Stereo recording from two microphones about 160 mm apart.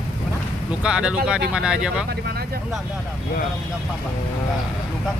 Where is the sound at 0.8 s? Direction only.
5° right (ahead or behind).